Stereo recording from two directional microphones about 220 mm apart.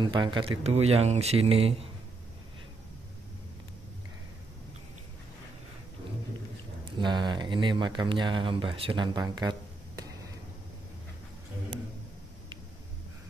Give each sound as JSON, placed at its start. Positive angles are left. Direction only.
{"t": 0.0, "sound": "speech", "side_deg": -20}
{"t": 6.8, "sound": "speech", "side_deg": -20}